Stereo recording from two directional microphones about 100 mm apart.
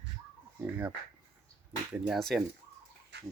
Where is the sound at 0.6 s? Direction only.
15° right (ahead or behind).